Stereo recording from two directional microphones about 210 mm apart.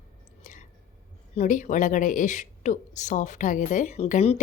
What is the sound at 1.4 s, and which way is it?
Speech, 35° left (ahead or behind).